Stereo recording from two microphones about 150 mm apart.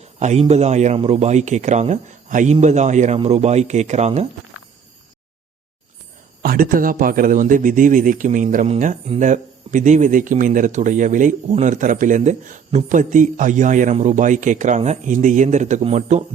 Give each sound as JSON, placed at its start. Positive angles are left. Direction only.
{"t": 0.2, "sound": "speech", "side_deg": -45}
{"t": 6.4, "sound": "speech", "side_deg": -70}